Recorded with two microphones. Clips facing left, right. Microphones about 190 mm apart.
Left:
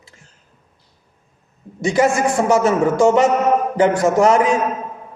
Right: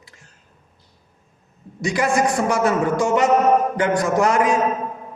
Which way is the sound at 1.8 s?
25° left (ahead or behind).